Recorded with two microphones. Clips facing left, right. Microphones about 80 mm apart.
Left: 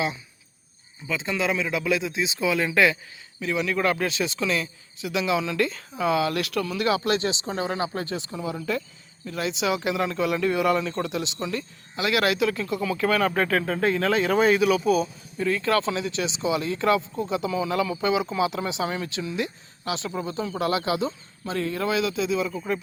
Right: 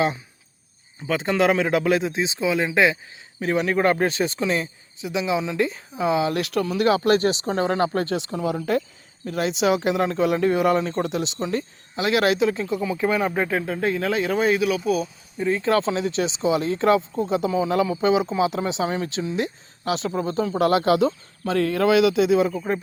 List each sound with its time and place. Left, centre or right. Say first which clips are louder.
1.0 s speech: right 6 dB; right
3.4 s speech: right 4 dB; right
6.4 s speech: right 4 dB; right
12.7 s speech: right 1 dB; centre
15.4 s speech: right 2 dB; right
21.0 s speech: right 7 dB; right